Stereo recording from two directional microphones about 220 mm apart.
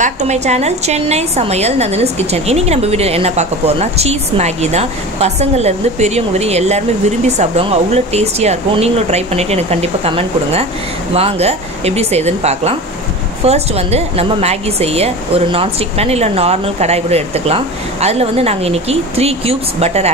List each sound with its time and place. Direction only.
0.0 s a woman's voice: 30° right (ahead or behind)